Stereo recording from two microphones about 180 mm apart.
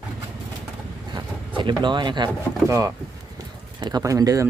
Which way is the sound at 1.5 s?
25° right (ahead or behind).